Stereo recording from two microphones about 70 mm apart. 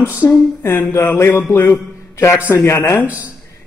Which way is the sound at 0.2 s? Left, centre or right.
Left.